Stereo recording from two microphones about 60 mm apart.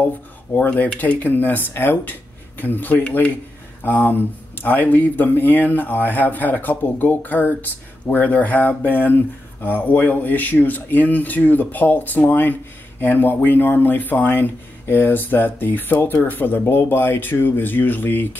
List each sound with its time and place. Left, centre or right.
0.6 s speech: left
1.2 s speech: left